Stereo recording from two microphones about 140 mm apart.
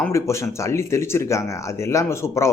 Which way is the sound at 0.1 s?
20° left (ahead or behind).